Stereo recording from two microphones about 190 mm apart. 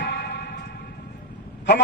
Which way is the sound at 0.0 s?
65° left (ahead or behind).